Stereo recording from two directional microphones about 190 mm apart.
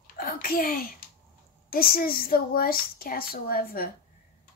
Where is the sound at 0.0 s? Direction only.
50° left (ahead or behind).